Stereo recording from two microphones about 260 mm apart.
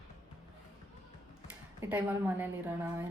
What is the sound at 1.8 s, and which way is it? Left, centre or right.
Speech, centre.